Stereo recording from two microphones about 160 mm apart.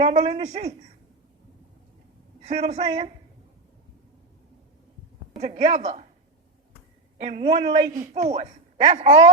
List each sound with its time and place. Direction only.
0.0 s speech: 35° right (ahead or behind)
2.4 s a man's voice: 45° right (ahead or behind)
5.4 s a woman's voice: 45° right (ahead or behind)
7.2 s speech: 45° right (ahead or behind)